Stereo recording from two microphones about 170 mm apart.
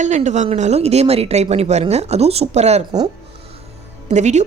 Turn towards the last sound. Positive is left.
turn(degrees=-45)  # may be behind; listen again after turning